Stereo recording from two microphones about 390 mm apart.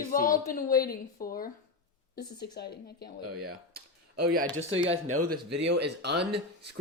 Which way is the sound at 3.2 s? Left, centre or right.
Right.